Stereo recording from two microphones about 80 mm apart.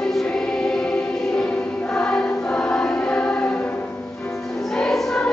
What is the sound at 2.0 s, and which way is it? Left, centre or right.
Choir, centre.